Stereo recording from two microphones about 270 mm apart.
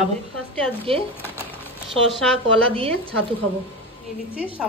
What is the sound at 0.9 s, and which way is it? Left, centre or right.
Speech, right.